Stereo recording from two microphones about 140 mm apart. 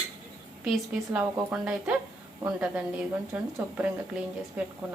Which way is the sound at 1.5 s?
5° right (ahead or behind).